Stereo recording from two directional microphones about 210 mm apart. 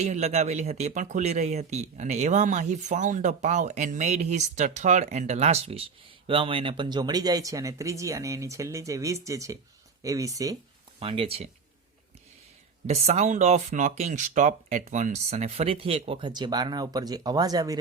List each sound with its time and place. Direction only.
0.0 s speech: 30° right (ahead or behind); by 10.6 s 15° right (ahead or behind)
11.0 s speech: 25° right (ahead or behind)
12.9 s speech: 30° right (ahead or behind)